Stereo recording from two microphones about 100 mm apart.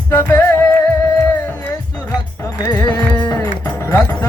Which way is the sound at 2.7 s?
40° left (ahead or behind).